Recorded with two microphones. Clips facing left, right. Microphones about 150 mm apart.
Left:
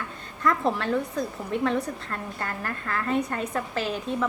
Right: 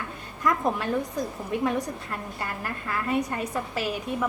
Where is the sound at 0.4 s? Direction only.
15° right (ahead or behind).